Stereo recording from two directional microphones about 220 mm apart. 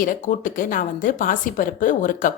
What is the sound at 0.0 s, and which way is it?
A woman's voice, 40° left (ahead or behind).